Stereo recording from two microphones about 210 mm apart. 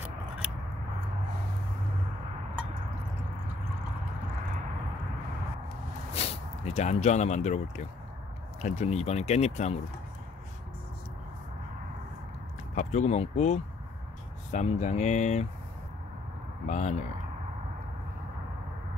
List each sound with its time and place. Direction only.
6.1 s speech: 30° left (ahead or behind)
12.7 s speech: 35° left (ahead or behind)
16.6 s speech: 35° left (ahead or behind)